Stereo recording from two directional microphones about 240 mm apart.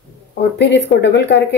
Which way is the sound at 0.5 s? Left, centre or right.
Left.